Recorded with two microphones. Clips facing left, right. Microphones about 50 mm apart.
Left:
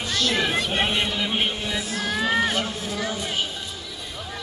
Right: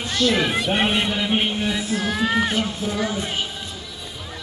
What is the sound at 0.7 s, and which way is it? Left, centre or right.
Speech, centre.